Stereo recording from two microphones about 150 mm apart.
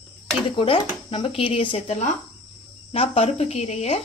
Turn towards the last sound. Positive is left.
turn(degrees=45)  # may be behind; listen again after turning